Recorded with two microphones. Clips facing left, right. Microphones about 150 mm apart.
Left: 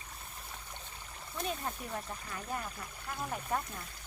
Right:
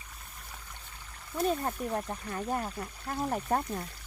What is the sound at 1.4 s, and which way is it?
Speech, 40° right (ahead or behind).